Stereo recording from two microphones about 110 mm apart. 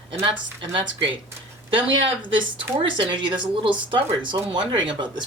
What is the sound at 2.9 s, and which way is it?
Speech, 45° right (ahead or behind).